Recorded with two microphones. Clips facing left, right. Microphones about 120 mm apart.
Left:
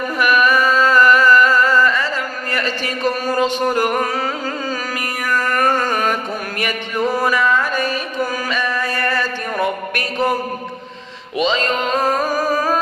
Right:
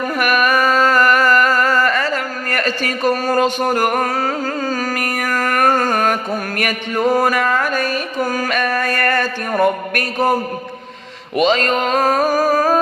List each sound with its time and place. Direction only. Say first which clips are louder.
0.2 s a sound: left 1 dB; 45° right (ahead or behind)
6.6 s music: right 1 dB; 50° right (ahead or behind)
11.3 s music: right 3 dB; 50° right (ahead or behind)